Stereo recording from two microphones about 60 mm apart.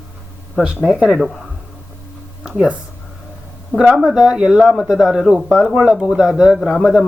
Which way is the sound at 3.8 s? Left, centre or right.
Centre.